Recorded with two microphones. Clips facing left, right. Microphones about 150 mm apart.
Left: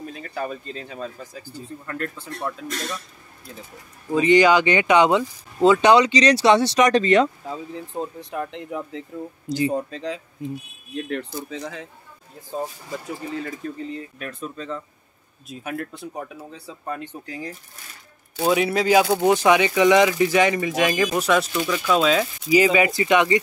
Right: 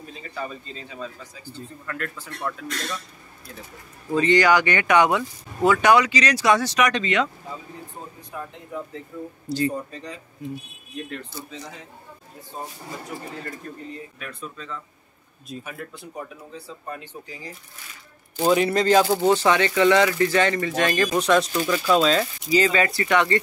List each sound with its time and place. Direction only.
0.1 s speech: 55° left (ahead or behind)
1.9 s speech: 30° left (ahead or behind)
4.1 s speech: 15° left (ahead or behind); by 7.2 s 40° left (ahead or behind)
7.7 s speech: 90° left
9.5 s speech: 15° left (ahead or behind)
9.8 s speech: 90° left
14.1 s speech: 40° left (ahead or behind)
15.5 s a man's voice: centre (ahead or behind)
16.8 s speech: 60° left (ahead or behind)
18.4 s a man's voice: centre (ahead or behind)